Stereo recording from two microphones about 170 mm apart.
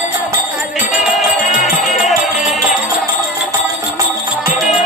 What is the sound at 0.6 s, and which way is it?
Music, centre (ahead or behind).